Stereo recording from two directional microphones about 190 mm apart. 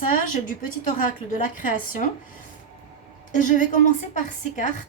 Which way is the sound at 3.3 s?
40° left (ahead or behind).